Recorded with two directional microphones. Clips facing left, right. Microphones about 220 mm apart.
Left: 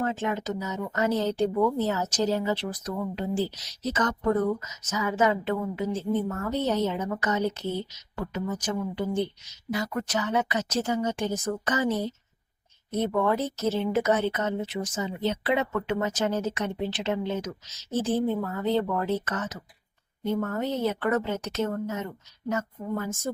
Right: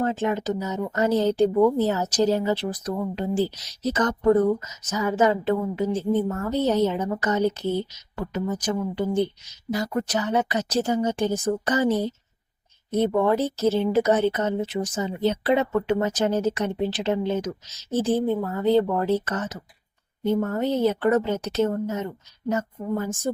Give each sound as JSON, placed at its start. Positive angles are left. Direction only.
{"t": 0.0, "sound": "speech", "side_deg": -35}